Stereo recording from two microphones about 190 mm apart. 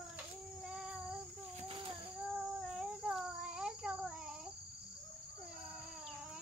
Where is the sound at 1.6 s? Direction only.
25° right (ahead or behind).